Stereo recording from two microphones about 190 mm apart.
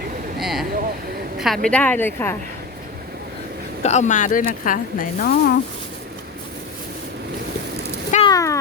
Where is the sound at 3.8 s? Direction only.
35° left (ahead or behind).